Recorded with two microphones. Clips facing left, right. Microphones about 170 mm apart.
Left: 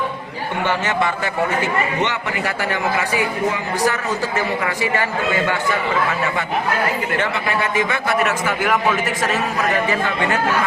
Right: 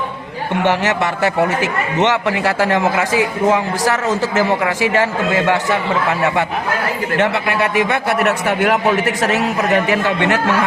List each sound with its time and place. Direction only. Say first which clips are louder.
0.6 s a man's voice: right 3 dB; 75° right (ahead or behind)